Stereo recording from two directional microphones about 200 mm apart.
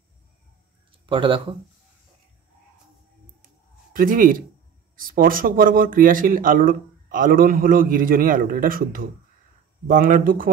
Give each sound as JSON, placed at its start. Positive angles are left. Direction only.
{"t": 1.0, "sound": "speech", "side_deg": -25}
{"t": 3.9, "sound": "speech", "side_deg": -45}